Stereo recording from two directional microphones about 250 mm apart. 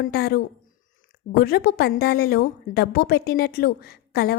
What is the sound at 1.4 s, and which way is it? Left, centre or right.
A woman's voice, left.